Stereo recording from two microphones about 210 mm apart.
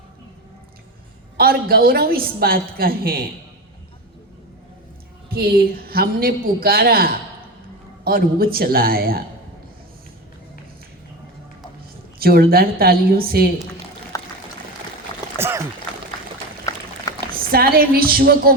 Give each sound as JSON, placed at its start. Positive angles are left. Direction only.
{"t": 1.4, "sound": "a woman's voice", "side_deg": -45}
{"t": 5.3, "sound": "a woman's voice", "side_deg": -45}
{"t": 12.2, "sound": "a woman's voice", "side_deg": -45}
{"t": 14.1, "sound": "pour", "side_deg": 15}
{"t": 15.4, "sound": "a sound", "side_deg": -10}
{"t": 17.1, "sound": "a sound", "side_deg": 15}
{"t": 17.5, "sound": "a woman's voice", "side_deg": -45}